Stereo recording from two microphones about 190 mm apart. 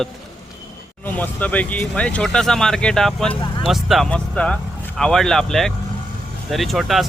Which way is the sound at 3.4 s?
25° left (ahead or behind).